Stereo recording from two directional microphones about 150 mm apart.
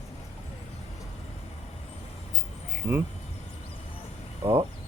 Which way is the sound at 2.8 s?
30° right (ahead or behind).